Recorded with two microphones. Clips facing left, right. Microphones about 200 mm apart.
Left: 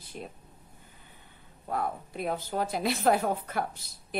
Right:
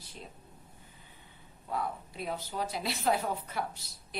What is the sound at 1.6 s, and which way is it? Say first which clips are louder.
A woman's voice: left 3 dB; 55° left (ahead or behind).